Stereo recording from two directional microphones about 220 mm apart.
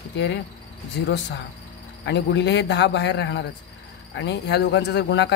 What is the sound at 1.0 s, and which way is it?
Speech, 55° left (ahead or behind).